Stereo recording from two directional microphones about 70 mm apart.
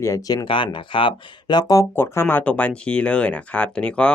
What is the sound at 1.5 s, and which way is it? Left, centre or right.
Speech, left.